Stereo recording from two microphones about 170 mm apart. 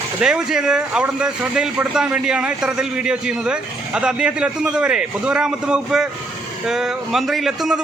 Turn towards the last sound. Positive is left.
turn(degrees=-5)  # may be behind; listen again after turning